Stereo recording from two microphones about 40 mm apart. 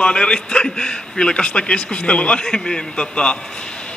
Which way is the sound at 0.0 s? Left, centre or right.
Left.